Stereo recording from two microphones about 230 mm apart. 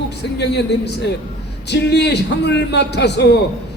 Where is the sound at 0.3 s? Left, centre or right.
Left.